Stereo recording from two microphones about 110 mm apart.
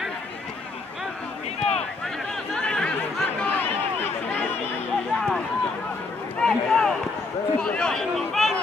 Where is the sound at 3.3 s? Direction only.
15° left (ahead or behind).